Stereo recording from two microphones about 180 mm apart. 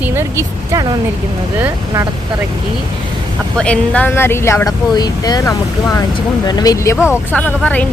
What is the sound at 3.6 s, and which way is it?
Speech, 5° left (ahead or behind).